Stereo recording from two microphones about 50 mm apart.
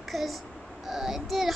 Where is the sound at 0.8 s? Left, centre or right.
Centre.